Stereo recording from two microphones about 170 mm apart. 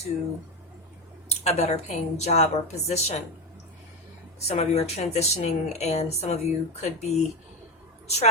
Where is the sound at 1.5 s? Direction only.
40° left (ahead or behind).